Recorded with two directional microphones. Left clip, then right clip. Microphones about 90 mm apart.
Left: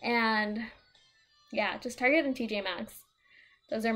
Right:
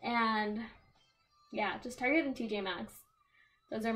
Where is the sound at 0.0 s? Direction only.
20° left (ahead or behind).